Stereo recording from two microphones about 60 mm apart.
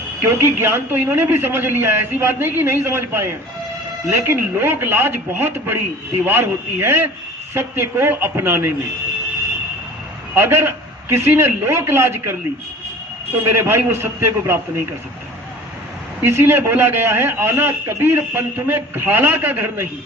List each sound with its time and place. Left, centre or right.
0.2 s a man's voice: right
4.0 s a man's voice: right
10.3 s a man's voice: right
13.5 s a man's voice: right
16.2 s a man's voice: right